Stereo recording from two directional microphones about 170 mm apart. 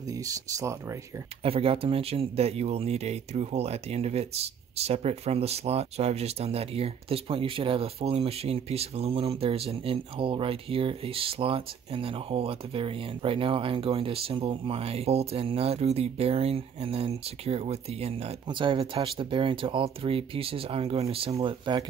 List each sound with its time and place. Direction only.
0.1 s speech: 20° right (ahead or behind)
1.4 s speech: 35° right (ahead or behind)